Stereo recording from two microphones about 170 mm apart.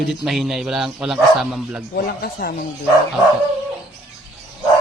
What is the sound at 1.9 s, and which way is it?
Speech, 65° left (ahead or behind).